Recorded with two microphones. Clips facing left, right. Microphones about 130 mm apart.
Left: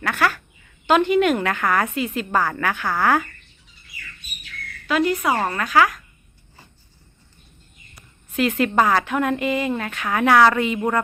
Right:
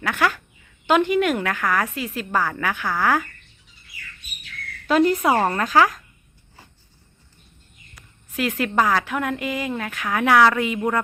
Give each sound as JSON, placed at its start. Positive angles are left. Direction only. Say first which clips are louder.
{"t": 0.0, "sound": "a woman's voice", "louder": "even", "side_deg": -15}
{"t": 4.9, "sound": "speech", "louder": "right 3 dB", "side_deg": -35}
{"t": 8.4, "sound": "a woman's voice", "louder": "left 3 dB", "side_deg": -5}